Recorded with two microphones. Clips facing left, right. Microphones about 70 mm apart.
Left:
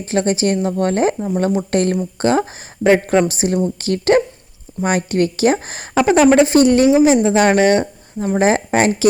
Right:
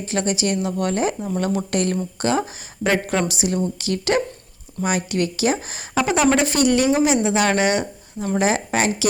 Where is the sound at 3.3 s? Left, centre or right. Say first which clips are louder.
Left 4 dB; left.